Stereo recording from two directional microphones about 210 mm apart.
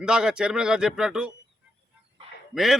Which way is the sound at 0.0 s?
5° right (ahead or behind).